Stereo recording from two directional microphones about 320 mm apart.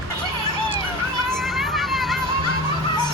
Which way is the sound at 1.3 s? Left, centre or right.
Centre.